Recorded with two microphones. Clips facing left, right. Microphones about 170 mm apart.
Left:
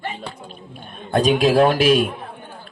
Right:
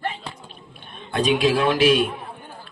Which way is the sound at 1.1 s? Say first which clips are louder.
Left 4 dB; 45° left (ahead or behind).